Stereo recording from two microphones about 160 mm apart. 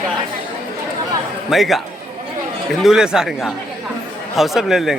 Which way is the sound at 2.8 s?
5° right (ahead or behind).